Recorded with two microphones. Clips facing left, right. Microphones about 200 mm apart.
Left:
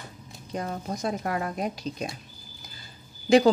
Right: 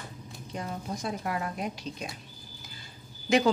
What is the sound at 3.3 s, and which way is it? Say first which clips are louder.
Speech: left 6 dB; 35° left (ahead or behind).